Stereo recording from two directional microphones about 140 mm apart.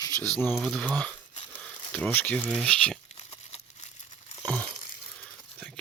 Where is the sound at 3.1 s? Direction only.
45° left (ahead or behind).